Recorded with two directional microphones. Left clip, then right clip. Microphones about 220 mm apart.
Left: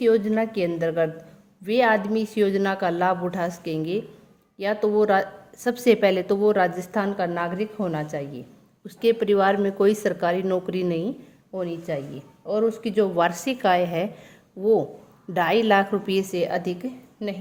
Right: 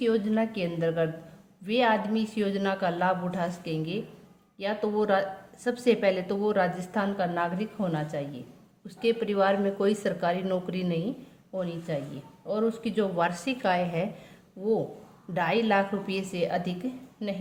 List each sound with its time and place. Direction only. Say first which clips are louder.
0.0 s a woman's voice: left 6 dB; 40° left (ahead or behind)